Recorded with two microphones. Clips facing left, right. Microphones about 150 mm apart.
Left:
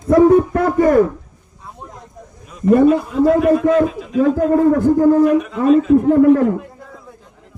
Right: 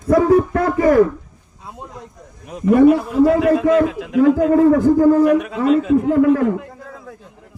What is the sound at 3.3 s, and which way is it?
Speech, 80° right.